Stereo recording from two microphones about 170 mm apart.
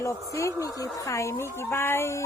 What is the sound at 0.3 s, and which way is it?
Speech, 20° left (ahead or behind).